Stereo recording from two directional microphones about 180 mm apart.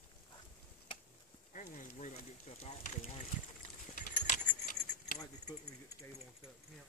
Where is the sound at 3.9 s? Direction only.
45° left (ahead or behind).